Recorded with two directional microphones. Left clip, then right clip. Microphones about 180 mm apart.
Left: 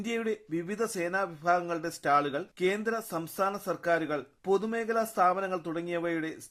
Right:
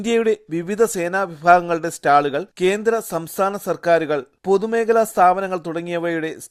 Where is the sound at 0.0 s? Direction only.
45° right (ahead or behind).